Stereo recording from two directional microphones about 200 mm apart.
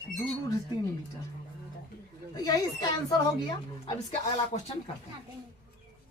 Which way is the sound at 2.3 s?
20° left (ahead or behind).